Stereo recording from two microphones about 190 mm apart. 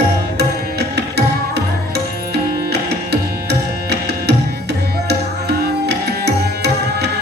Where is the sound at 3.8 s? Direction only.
60° right (ahead or behind).